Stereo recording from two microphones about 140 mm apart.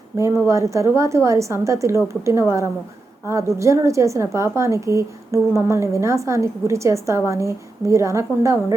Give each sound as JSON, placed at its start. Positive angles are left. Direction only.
{"t": 0.2, "sound": "a woman's voice", "side_deg": -20}